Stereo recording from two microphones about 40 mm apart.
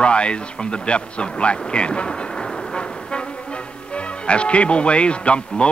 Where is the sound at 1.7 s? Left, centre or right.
Left.